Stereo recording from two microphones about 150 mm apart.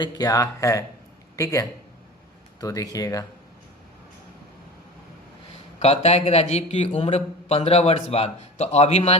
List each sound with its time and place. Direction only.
0.0 s speech: 25° left (ahead or behind)
5.8 s a man's voice: 45° left (ahead or behind)